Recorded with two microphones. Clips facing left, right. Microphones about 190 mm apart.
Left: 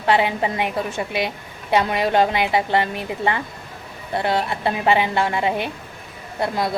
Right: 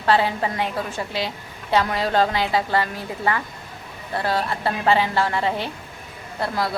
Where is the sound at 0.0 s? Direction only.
20° left (ahead or behind).